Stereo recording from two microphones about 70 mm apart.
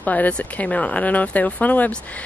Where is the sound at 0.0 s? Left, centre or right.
Left.